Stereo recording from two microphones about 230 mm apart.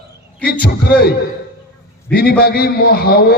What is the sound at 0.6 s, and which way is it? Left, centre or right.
A man's voice, left.